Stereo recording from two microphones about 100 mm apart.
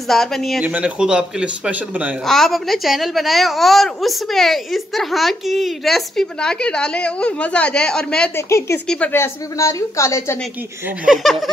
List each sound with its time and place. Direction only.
0.1 s a woman's voice: 5° left (ahead or behind)
0.6 s speech: 15° right (ahead or behind)
2.2 s a woman's voice: 5° left (ahead or behind)
8.4 s a woman's voice: 30° left (ahead or behind)
11.1 s a woman's voice: centre (ahead or behind)